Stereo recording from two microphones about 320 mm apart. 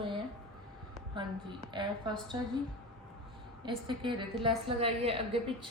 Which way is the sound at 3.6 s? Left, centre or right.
Centre.